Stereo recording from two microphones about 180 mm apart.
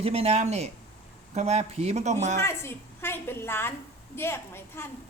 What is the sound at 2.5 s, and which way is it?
A woman's voice, 15° left (ahead or behind).